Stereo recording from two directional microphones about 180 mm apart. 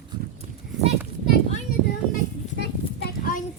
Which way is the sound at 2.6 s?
55° left (ahead or behind).